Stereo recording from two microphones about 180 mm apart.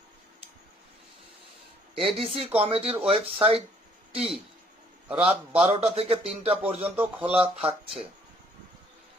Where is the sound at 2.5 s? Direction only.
30° right (ahead or behind).